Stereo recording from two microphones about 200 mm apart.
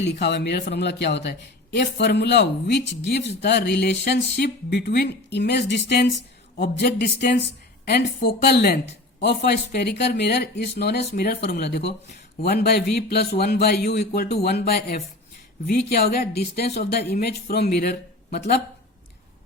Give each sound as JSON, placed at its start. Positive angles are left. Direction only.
{"t": 0.0, "sound": "a man's voice", "side_deg": 60}